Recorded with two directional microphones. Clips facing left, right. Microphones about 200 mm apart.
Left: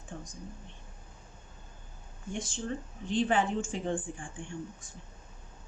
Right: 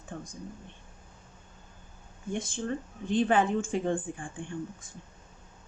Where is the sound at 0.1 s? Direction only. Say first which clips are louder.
Right 3 dB; 55° right (ahead or behind).